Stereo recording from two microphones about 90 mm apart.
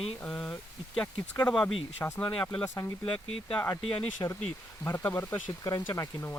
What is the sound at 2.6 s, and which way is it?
Speech, 35° left (ahead or behind).